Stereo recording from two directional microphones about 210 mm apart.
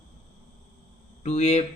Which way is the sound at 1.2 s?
30° left (ahead or behind).